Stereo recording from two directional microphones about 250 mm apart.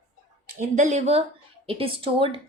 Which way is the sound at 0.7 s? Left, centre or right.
Right.